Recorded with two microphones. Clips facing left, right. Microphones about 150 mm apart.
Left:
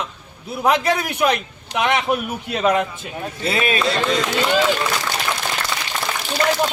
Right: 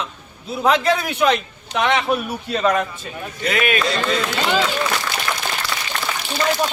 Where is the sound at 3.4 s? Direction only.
30° left (ahead or behind).